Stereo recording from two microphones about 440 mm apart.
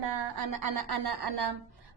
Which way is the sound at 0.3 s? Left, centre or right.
Right.